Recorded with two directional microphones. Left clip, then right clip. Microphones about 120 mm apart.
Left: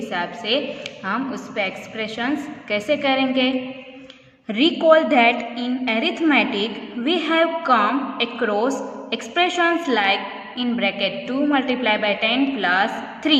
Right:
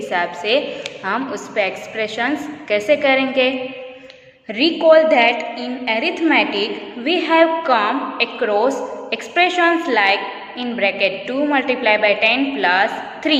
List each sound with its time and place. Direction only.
0.1 s a woman's voice: 15° left (ahead or behind)
4.4 s a woman's voice: 50° left (ahead or behind)